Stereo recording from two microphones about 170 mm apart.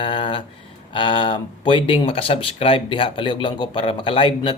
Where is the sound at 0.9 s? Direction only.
30° left (ahead or behind).